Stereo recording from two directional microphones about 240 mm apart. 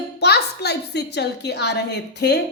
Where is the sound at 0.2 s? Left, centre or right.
Left.